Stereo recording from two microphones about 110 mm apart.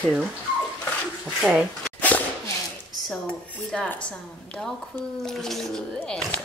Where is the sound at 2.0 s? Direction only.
15° left (ahead or behind).